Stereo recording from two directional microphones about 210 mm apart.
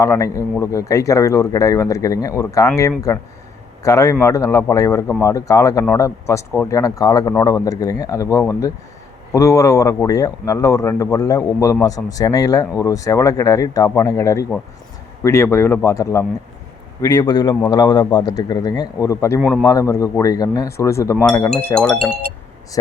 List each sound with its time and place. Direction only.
0.0 s speech: 15° left (ahead or behind)
19.4 s a man's voice: centre (ahead or behind)
19.6 s speech: 15° left (ahead or behind)